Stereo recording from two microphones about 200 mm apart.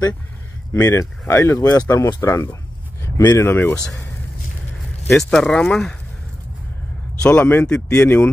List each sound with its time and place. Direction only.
0.7 s speech: 15° left (ahead or behind)
5.3 s speech: 5° left (ahead or behind)
7.2 s speech: 5° left (ahead or behind)